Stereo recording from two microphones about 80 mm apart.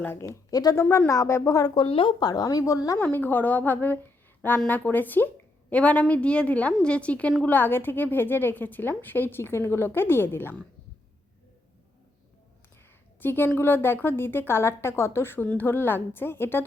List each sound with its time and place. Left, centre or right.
0.2 s a woman's voice: left
0.8 s speech: left
1.7 s speech: left
2.2 s a woman's voice: left
3.0 s a woman's voice: left
13.1 s a woman's voice: left